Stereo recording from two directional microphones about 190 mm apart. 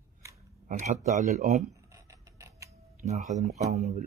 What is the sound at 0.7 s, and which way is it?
Speech, 40° right (ahead or behind).